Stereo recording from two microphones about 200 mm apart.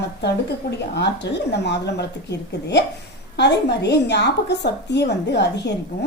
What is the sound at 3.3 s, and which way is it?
A woman's voice, 55° left (ahead or behind).